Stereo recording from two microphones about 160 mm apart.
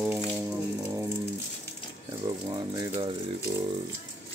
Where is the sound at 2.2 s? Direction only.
25° right (ahead or behind).